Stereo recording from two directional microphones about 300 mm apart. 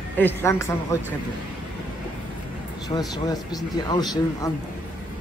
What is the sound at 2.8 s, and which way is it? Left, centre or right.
A man's voice, centre.